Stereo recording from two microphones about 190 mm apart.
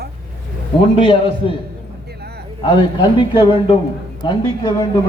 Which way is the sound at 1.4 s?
25° left (ahead or behind).